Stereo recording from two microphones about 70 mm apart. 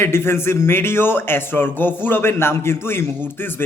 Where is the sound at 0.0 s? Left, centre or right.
Left.